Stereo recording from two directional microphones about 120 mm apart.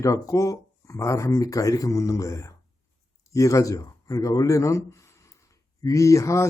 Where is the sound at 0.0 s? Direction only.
25° left (ahead or behind).